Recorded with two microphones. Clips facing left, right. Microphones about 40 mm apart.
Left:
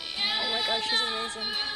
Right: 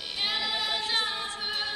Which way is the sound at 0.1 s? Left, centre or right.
Centre.